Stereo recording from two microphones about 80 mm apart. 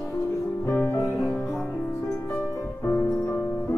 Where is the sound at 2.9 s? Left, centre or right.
Left.